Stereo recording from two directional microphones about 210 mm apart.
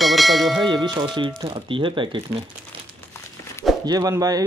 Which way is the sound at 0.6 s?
20° right (ahead or behind).